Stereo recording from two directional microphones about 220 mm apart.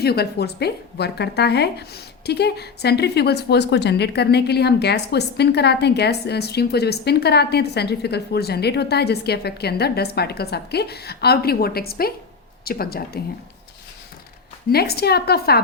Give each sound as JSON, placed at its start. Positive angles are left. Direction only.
{"t": 0.0, "sound": "a woman's voice", "side_deg": 45}
{"t": 14.7, "sound": "a woman's voice", "side_deg": 45}